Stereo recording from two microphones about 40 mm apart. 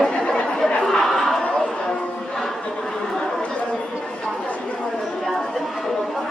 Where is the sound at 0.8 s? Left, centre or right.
Centre.